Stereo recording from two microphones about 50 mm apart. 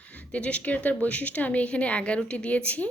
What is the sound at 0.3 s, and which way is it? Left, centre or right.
Speech, left.